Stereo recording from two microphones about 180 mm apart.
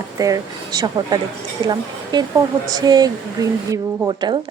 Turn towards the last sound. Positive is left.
turn(degrees=-25)  # may be behind; listen again after turning